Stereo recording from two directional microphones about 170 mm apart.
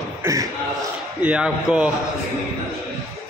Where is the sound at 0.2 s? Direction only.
20° right (ahead or behind).